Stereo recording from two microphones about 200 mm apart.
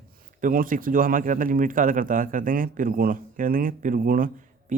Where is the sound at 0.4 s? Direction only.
45° right (ahead or behind).